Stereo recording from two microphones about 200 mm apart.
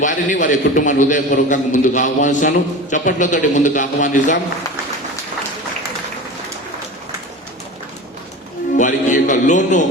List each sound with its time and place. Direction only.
0.0 s a man's voice: 40° left (ahead or behind)
8.7 s music: 40° left (ahead or behind)